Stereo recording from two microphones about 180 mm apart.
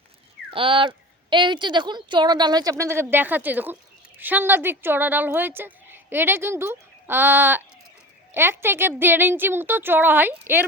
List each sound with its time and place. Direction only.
0.5 s a woman's voice: 30° right (ahead or behind); by 10.7 s 10° right (ahead or behind)